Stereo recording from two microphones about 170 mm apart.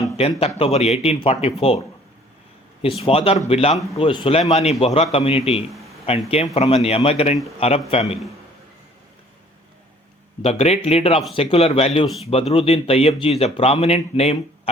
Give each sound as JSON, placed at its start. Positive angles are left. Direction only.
{"t": 0.2, "sound": "speech", "side_deg": 35}
{"t": 2.8, "sound": "speech", "side_deg": 35}
{"t": 10.4, "sound": "speech", "side_deg": 35}